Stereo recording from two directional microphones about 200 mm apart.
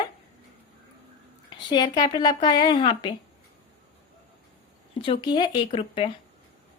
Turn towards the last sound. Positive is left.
turn(degrees=30)  # may be behind; listen again after turning